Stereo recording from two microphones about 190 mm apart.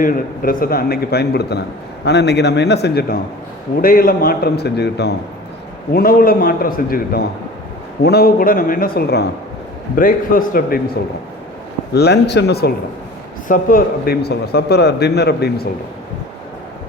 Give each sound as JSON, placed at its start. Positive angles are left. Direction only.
{"t": 0.0, "sound": "speech", "side_deg": 50}
{"t": 5.9, "sound": "a man's voice", "side_deg": 50}
{"t": 11.9, "sound": "speech", "side_deg": 60}
{"t": 13.5, "sound": "speech", "side_deg": 45}